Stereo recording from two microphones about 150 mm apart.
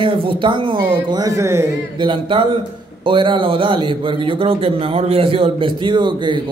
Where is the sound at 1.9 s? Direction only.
35° right (ahead or behind).